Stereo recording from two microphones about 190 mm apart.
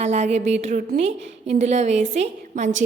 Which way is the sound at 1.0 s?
35° right (ahead or behind).